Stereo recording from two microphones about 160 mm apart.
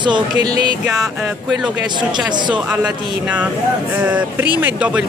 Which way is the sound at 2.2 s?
30° right (ahead or behind).